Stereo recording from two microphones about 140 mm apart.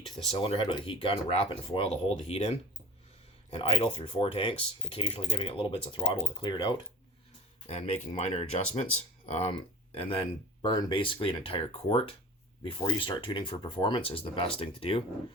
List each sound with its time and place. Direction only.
0.3 s speech: 40° left (ahead or behind)
7.7 s speech: 45° left (ahead or behind)